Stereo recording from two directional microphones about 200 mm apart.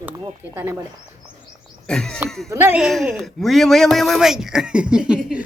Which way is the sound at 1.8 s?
5° left (ahead or behind).